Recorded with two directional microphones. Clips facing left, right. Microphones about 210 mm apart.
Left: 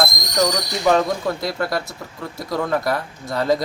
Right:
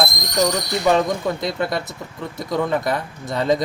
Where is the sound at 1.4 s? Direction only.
20° right (ahead or behind).